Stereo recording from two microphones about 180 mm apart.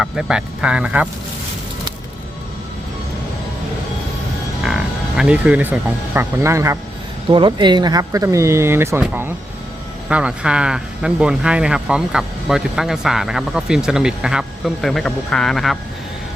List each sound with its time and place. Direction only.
0.0 s speech: 5° right (ahead or behind)
4.6 s speech: 5° right (ahead or behind)
7.3 s speech: 25° right (ahead or behind); by 15.8 s centre (ahead or behind)